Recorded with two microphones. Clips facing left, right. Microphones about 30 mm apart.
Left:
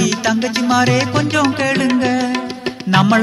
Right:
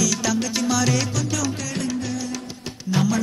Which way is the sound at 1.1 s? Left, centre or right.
Left.